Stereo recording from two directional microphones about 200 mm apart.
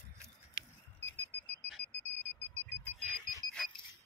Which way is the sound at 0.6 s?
10° left (ahead or behind).